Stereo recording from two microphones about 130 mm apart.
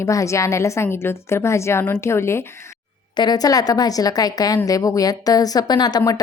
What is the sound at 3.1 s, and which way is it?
A woman's voice, 35° left (ahead or behind).